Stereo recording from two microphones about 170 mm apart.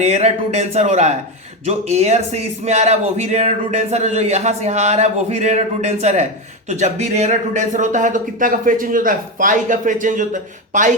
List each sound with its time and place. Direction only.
0.0 s speech: 40° right (ahead or behind)